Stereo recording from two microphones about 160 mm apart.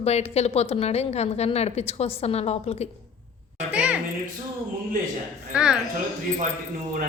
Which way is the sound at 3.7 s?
5° right (ahead or behind).